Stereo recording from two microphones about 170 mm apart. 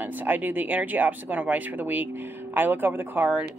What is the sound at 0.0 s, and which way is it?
Speech, 10° right (ahead or behind).